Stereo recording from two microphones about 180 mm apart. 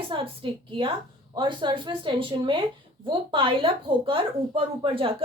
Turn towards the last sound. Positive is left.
turn(degrees=-30)  # may be behind; listen again after turning